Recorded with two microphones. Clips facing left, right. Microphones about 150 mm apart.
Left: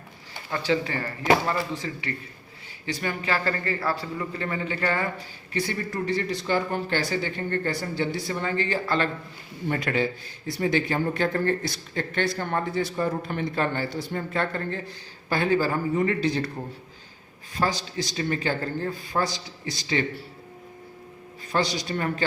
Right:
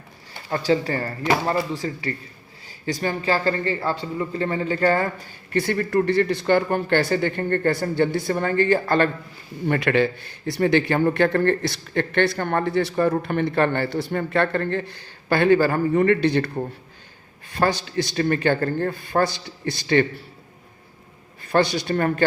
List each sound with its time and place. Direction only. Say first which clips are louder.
0.5 s speech: right 4 dB; 40° right (ahead or behind)
5.5 s speech: right 7 dB; 55° right (ahead or behind)
9.6 s a man's voice: right 6 dB; 75° right (ahead or behind)
17.5 s speech: right 5 dB; 60° right (ahead or behind)
21.4 s speech: right 6 dB; 60° right (ahead or behind)